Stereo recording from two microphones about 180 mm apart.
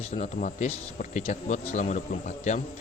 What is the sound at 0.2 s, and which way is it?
Speech, 40° left (ahead or behind).